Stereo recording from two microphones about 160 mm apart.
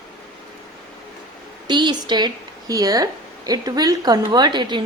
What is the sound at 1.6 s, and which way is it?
Speech, 30° right (ahead or behind).